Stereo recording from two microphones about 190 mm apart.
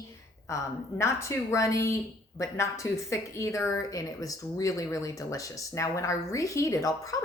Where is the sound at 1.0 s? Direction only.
15° left (ahead or behind).